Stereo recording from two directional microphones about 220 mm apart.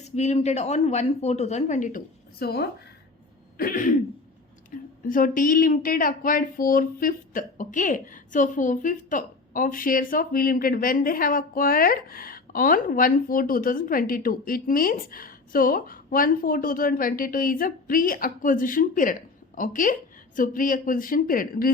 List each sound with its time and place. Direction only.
0.0 s speech: 30° left (ahead or behind)
2.4 s speech: 45° left (ahead or behind)
4.7 s a sound: 40° left (ahead or behind)
5.0 s speech: 40° left (ahead or behind)